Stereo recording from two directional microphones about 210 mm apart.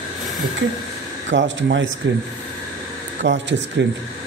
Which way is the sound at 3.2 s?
60° right (ahead or behind).